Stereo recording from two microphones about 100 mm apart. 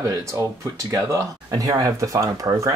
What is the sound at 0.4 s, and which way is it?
Speech, 35° right (ahead or behind).